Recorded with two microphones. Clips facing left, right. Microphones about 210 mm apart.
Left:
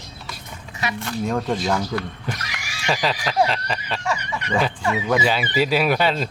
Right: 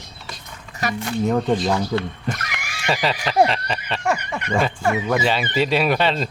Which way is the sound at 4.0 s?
55° right (ahead or behind).